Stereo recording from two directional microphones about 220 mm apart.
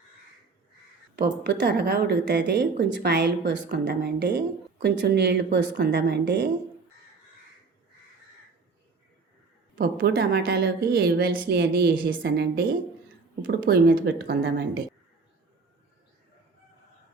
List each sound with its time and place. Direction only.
1.1 s a woman's voice: 50° right (ahead or behind)
9.7 s a woman's voice: 40° right (ahead or behind)